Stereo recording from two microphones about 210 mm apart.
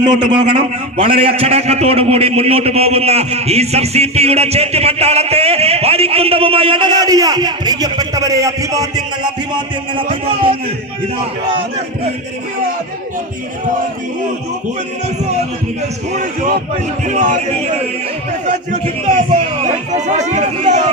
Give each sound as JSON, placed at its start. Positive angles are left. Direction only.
{"t": 0.0, "sound": "a man's voice", "side_deg": -20}
{"t": 17.1, "sound": "speech", "side_deg": -35}
{"t": 19.0, "sound": "speech", "side_deg": -35}